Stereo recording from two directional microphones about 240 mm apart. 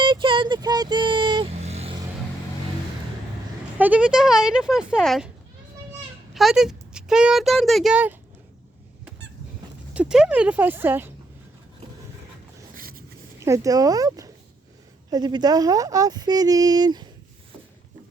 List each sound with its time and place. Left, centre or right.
0.0 s vehicle: centre
3.8 s speech: centre
6.3 s speech: centre
9.9 s speech: centre
12.7 s a sound: right
13.4 s speech: centre